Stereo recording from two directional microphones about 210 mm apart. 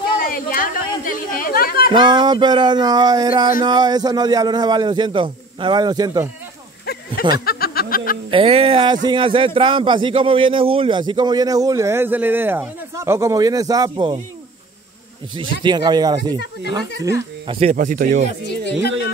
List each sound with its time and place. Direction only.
0.2 s a sound: 40° left (ahead or behind)
1.9 s a man's voice: 20° right (ahead or behind)
7.4 s speech: 45° left (ahead or behind)
8.3 s a man's voice: 25° right (ahead or behind)
15.6 s a man's voice: 20° right (ahead or behind)
17.6 s speech: 35° right (ahead or behind)